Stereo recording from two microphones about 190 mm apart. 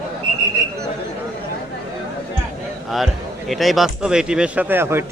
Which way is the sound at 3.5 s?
Centre (ahead or behind).